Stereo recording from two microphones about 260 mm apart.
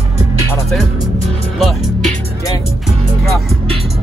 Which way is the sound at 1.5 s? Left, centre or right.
Centre.